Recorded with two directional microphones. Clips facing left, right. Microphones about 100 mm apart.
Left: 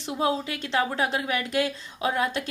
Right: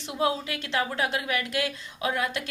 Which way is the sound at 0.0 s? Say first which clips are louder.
Left 1 dB; 30° left (ahead or behind).